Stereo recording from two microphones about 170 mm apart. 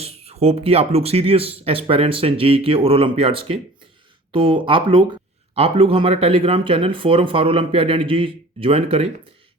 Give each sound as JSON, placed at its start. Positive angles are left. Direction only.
{"t": 0.0, "sound": "speech", "side_deg": -35}